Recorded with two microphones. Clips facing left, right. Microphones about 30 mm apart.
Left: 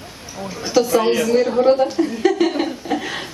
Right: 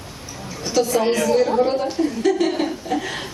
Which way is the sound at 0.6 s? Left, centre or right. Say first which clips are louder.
Left 3 dB; centre.